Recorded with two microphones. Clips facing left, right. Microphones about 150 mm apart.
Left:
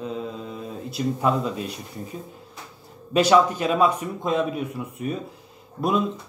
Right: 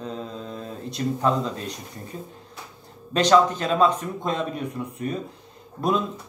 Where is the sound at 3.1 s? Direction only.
10° left (ahead or behind).